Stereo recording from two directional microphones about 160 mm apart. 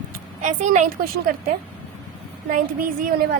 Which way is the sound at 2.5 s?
60° right (ahead or behind).